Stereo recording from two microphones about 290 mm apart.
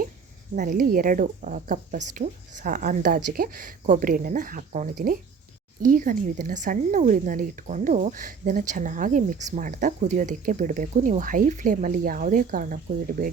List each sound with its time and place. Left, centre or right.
0.5 s speech: right